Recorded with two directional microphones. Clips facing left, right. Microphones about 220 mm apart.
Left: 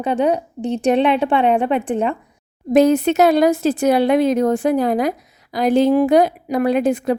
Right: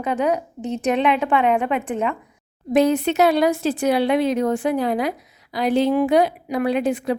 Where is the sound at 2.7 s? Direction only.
45° left (ahead or behind).